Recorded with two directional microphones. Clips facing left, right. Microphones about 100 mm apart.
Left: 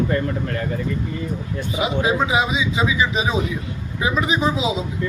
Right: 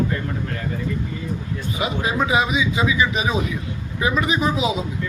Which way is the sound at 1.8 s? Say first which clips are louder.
Left 3 dB; 20° left (ahead or behind).